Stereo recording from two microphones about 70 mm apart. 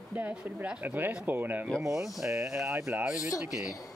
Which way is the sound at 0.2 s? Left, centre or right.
Right.